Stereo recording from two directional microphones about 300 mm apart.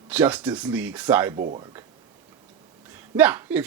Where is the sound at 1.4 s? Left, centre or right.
Right.